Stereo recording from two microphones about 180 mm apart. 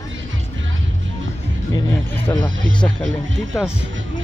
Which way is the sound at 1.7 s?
10° left (ahead or behind).